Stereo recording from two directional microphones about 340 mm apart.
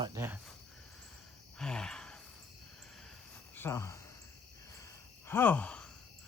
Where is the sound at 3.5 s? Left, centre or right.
Centre.